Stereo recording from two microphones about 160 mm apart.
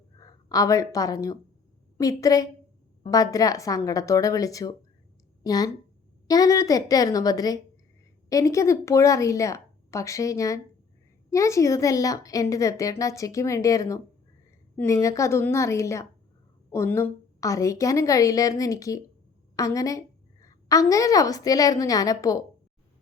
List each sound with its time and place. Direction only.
0.2 s a woman's voice: 25° left (ahead or behind)